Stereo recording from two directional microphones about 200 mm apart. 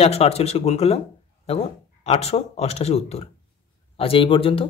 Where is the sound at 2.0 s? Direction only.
30° left (ahead or behind).